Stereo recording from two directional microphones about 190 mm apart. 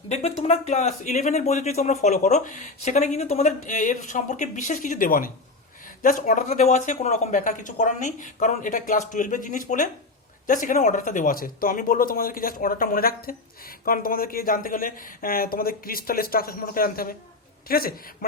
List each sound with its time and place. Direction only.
0.1 s speech: 35° left (ahead or behind); by 18.3 s 50° left (ahead or behind)